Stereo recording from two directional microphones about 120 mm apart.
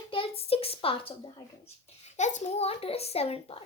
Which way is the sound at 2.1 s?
80° left.